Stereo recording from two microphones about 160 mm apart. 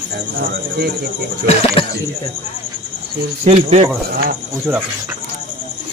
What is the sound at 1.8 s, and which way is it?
Speech, 35° left (ahead or behind).